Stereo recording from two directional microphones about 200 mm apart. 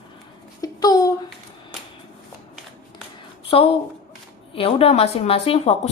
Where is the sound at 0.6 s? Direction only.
20° left (ahead or behind).